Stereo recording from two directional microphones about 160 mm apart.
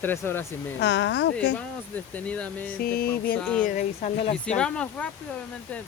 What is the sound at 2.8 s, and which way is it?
Music, 70° left (ahead or behind).